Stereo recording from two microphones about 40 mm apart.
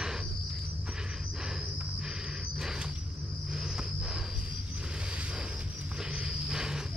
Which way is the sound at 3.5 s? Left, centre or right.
Centre.